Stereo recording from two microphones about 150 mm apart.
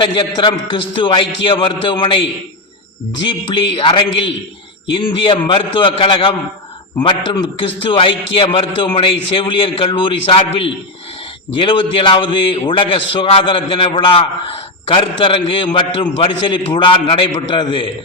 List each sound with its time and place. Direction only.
0.0 s a man's voice: 30° left (ahead or behind)
3.2 s a man's voice: 35° left (ahead or behind)